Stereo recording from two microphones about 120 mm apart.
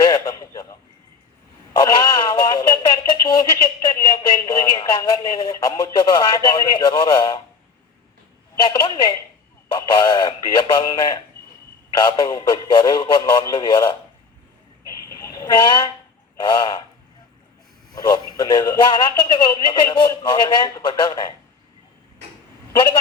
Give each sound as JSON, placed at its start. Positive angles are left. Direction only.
{"t": 0.0, "sound": "a sound", "side_deg": 35}
{"t": 1.8, "sound": "speech", "side_deg": 35}
{"t": 8.6, "sound": "speech", "side_deg": 40}
{"t": 14.8, "sound": "a sound", "side_deg": 25}
{"t": 16.4, "sound": "speech", "side_deg": 35}
{"t": 17.9, "sound": "speech", "side_deg": 35}
{"t": 22.7, "sound": "speech", "side_deg": 45}